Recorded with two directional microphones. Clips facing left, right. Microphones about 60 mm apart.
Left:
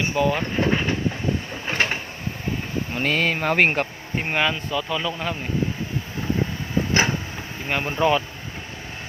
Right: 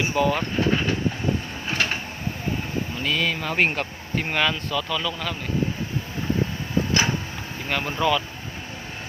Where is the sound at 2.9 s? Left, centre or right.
Left.